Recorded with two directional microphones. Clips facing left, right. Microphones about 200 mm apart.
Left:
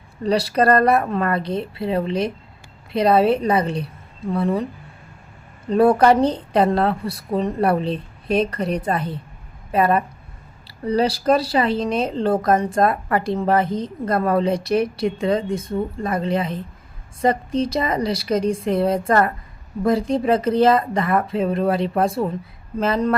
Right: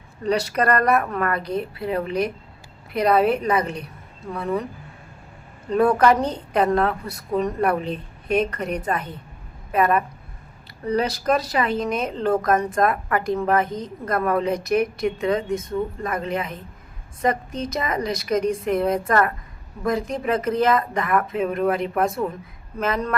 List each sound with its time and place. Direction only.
0.3 s a woman's voice: 35° left (ahead or behind)
5.7 s a woman's voice: 35° left (ahead or behind)